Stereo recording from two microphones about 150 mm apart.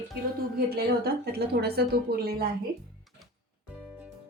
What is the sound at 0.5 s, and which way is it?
A woman's voice, 90° right.